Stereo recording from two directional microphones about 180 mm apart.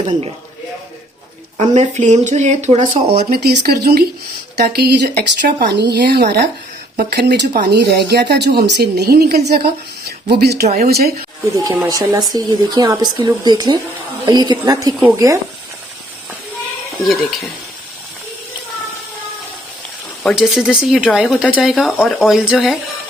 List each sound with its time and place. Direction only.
1.5 s speech: 40° right (ahead or behind)
3.2 s speech: 55° right (ahead or behind)
11.5 s speech: 20° right (ahead or behind)
17.0 s speech: centre (ahead or behind)
20.2 s speech: centre (ahead or behind)